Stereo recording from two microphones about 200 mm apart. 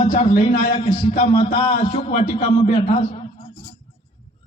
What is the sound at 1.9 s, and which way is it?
Speech, 35° left (ahead or behind).